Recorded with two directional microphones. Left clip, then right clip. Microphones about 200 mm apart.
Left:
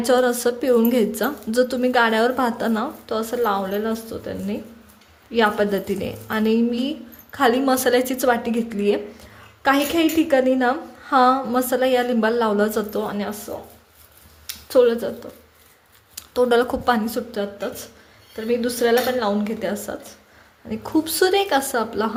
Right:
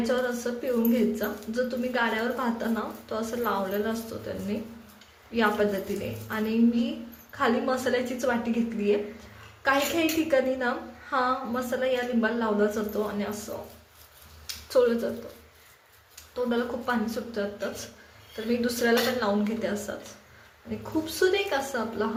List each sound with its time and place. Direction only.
0.0 s a woman's voice: 55° left (ahead or behind)
9.6 s a woman's voice: 45° left (ahead or behind)
14.4 s a sound: 40° left (ahead or behind)
16.1 s a woman's voice: 55° left (ahead or behind)